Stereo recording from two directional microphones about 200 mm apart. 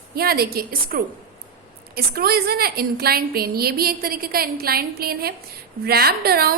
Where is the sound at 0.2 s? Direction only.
50° right (ahead or behind).